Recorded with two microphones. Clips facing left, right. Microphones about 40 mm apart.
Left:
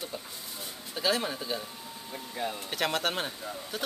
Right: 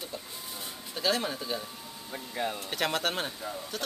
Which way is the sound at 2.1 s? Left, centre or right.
Centre.